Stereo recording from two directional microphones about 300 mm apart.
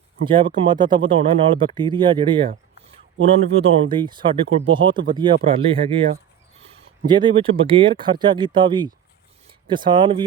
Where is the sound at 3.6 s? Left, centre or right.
Centre.